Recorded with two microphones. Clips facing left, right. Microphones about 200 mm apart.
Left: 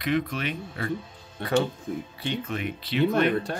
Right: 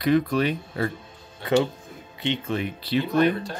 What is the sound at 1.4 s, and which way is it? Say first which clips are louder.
Speech: right 4 dB; 55° left (ahead or behind).